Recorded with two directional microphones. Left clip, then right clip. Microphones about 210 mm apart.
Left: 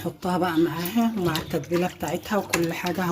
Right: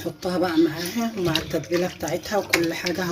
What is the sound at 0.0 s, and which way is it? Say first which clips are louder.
Speech: right 1 dB; 45° left (ahead or behind).